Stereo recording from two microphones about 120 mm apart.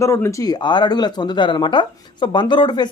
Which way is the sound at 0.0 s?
25° left (ahead or behind).